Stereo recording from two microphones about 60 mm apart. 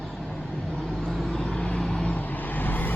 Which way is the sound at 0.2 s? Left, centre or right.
Centre.